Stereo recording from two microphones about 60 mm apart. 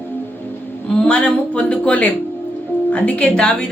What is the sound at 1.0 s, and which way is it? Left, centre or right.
Speech, centre.